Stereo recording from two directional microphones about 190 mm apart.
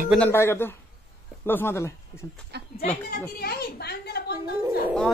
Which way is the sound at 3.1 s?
55° left (ahead or behind).